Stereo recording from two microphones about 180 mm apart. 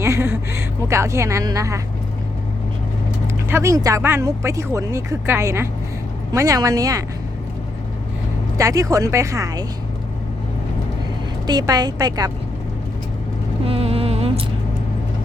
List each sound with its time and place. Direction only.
0.0 s a woman's voice: 15° right (ahead or behind)
3.5 s a woman's voice: 15° right (ahead or behind)
8.5 s speech: 20° right (ahead or behind)
11.4 s a woman's voice: 20° right (ahead or behind)
13.7 s music: 30° right (ahead or behind)